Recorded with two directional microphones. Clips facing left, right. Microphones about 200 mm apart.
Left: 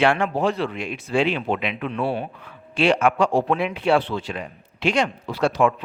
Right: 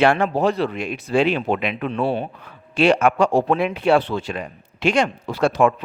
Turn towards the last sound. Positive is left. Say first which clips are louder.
# right 2 dB
turn(degrees=-50)  # may be behind; listen again after turning